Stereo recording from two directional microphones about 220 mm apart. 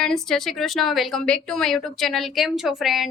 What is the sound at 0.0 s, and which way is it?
A woman's voice, centre (ahead or behind).